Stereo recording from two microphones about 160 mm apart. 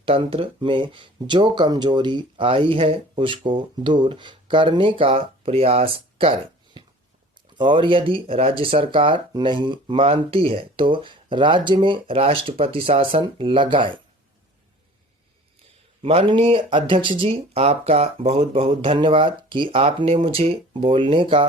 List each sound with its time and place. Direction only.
0.0 s speech: 35° right (ahead or behind)
16.0 s speech: 35° right (ahead or behind)